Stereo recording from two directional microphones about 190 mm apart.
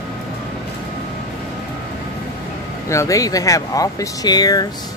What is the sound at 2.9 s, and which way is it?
Speech, 15° left (ahead or behind).